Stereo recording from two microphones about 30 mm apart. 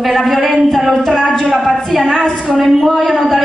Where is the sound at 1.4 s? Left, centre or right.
Centre.